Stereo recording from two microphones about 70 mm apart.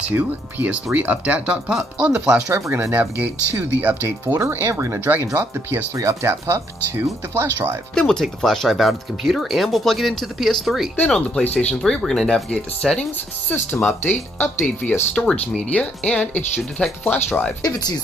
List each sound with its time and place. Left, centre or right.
0.1 s speech: right
2.9 s speech: right
7.9 s speech: centre
11.8 s speech: centre
13.5 s speech: left
15.1 s speech: centre
17.6 s speech: left